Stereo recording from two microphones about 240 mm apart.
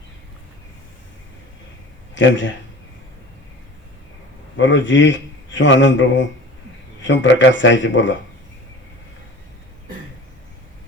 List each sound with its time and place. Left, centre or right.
2.1 s speech: left
4.5 s speech: left